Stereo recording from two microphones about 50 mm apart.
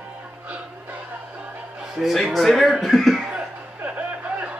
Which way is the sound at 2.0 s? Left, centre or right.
Centre.